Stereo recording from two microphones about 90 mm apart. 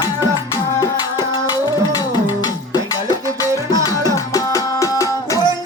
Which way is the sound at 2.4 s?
45° left (ahead or behind).